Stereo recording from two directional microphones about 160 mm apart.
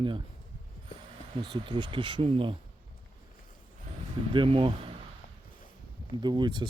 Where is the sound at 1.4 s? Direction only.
30° right (ahead or behind).